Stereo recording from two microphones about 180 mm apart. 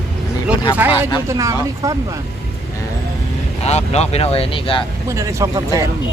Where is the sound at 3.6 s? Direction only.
35° left (ahead or behind).